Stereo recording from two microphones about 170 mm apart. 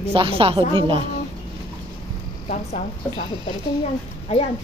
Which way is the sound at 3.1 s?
30° left (ahead or behind).